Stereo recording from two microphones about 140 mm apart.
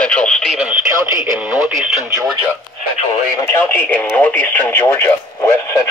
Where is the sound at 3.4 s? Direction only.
15° left (ahead or behind).